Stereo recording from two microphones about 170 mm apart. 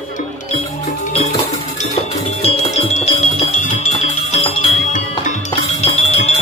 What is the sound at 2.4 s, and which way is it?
Music, 40° left (ahead or behind).